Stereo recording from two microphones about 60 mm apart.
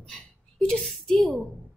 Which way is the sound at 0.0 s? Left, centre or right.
Centre.